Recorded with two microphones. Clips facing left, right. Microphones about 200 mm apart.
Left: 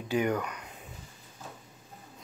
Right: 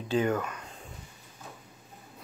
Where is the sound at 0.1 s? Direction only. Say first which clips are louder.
Right 1 dB; 15° left (ahead or behind).